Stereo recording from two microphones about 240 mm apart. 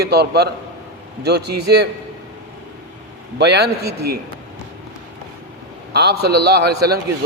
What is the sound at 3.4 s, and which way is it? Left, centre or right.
Speech, right.